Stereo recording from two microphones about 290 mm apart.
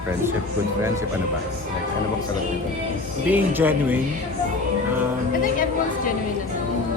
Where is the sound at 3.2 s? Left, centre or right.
Centre.